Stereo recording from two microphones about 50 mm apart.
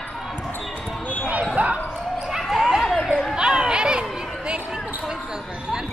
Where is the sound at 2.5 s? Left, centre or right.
Centre.